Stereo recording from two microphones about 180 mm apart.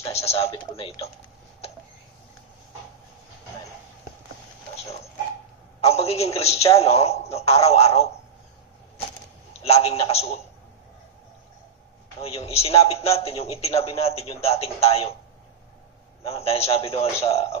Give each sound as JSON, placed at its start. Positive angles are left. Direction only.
{"t": 0.0, "sound": "a man's voice", "side_deg": 35}
{"t": 5.8, "sound": "a man's voice", "side_deg": 35}
{"t": 9.6, "sound": "a man's voice", "side_deg": 35}
{"t": 12.2, "sound": "a man's voice", "side_deg": 35}
{"t": 16.2, "sound": "a man's voice", "side_deg": 35}